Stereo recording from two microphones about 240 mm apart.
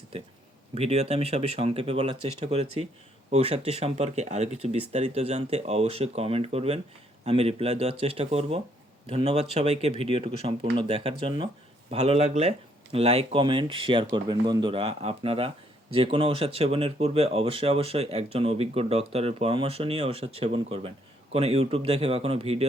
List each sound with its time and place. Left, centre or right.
0.7 s speech: right